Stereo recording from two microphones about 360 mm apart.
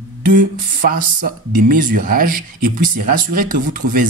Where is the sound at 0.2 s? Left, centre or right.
Right.